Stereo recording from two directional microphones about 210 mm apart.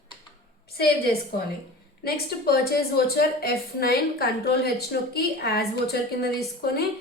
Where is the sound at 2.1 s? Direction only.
45° left (ahead or behind).